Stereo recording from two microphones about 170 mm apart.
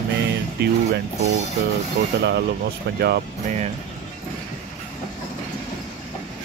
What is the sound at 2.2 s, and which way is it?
Speech, 80° right.